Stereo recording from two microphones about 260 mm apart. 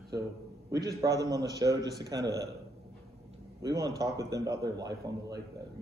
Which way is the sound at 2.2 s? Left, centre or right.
Right.